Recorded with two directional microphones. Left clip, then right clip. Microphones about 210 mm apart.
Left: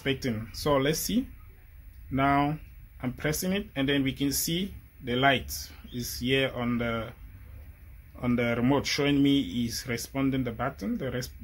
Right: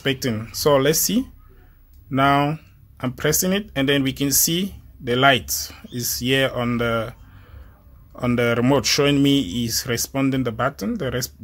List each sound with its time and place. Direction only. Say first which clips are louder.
0.0 s speech: right 7 dB; 45° right (ahead or behind)
8.2 s speech: right 8 dB; 45° right (ahead or behind)